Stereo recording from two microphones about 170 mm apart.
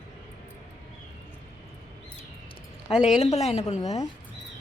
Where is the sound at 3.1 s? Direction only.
40° left (ahead or behind).